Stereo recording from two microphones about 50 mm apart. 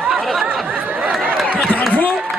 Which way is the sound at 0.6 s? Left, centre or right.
Right.